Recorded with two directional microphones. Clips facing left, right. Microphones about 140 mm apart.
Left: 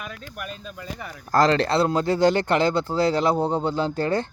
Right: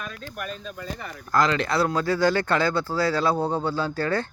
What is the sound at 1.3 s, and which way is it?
Speech, 35° left (ahead or behind).